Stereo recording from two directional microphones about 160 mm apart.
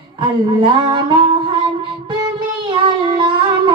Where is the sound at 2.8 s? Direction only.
30° right (ahead or behind).